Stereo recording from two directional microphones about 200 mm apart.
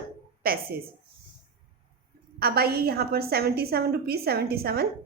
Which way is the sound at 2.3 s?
50° right (ahead or behind).